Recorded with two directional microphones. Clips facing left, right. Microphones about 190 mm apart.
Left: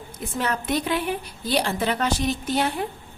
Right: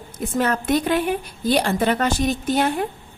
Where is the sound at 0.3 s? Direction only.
50° right (ahead or behind).